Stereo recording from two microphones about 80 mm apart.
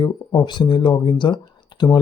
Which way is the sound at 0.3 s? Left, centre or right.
Left.